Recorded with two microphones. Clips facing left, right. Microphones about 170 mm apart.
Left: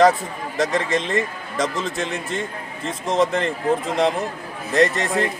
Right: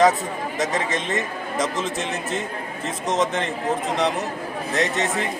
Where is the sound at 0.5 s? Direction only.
90° left.